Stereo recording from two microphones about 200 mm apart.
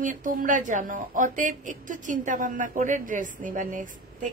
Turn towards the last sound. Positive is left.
turn(degrees=-40)  # may be behind; listen again after turning